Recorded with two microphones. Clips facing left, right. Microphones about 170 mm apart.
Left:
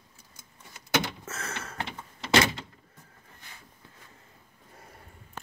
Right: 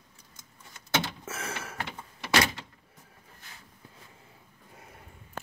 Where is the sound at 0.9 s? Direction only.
15° left (ahead or behind).